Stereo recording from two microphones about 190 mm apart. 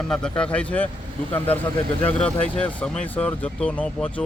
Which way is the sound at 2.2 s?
5° left (ahead or behind).